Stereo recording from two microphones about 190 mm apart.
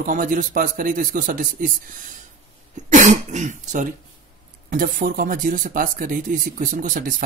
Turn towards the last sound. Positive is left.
turn(degrees=-45)  # may be behind; listen again after turning